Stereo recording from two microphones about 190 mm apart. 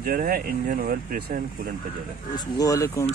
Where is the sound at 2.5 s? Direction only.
15° left (ahead or behind).